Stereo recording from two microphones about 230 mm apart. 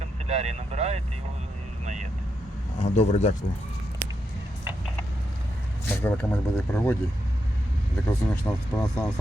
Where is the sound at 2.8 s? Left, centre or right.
Left.